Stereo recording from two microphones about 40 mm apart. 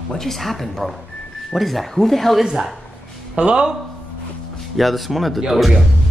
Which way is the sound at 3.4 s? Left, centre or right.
Right.